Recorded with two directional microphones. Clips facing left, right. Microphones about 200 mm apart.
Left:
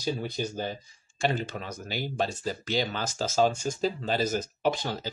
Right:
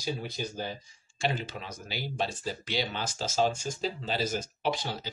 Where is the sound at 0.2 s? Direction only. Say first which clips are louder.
Left 4 dB; 45° left (ahead or behind).